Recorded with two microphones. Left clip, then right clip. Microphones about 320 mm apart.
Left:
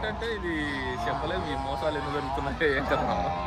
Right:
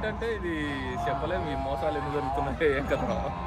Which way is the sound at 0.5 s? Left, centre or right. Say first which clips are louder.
Left 1 dB; left.